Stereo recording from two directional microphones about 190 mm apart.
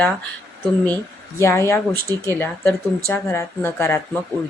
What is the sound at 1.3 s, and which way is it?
A woman's voice, 15° left (ahead or behind).